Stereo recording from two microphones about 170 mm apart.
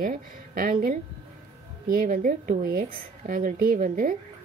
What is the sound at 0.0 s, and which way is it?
A woman's voice, 55° right (ahead or behind).